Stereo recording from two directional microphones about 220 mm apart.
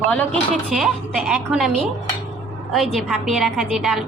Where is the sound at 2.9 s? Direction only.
Centre (ahead or behind).